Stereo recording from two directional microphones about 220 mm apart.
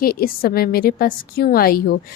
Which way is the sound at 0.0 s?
40° left (ahead or behind).